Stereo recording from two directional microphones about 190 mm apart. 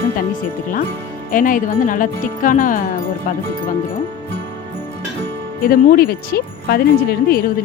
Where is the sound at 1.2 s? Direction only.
45° left (ahead or behind).